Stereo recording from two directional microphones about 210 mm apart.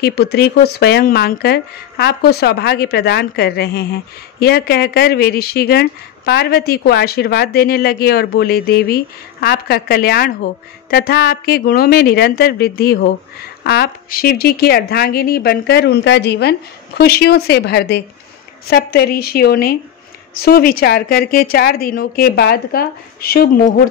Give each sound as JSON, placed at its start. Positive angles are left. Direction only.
{"t": 0.0, "sound": "speech", "side_deg": 50}